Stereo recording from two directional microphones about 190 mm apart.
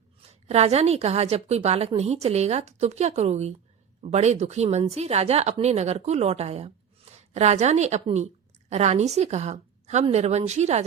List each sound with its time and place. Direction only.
0.4 s a woman's voice: 35° right (ahead or behind)